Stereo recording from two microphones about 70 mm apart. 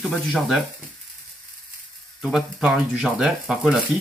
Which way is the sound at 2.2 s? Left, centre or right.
Centre.